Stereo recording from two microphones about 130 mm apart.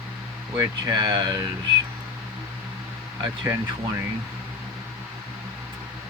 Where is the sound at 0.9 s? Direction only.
35° right (ahead or behind).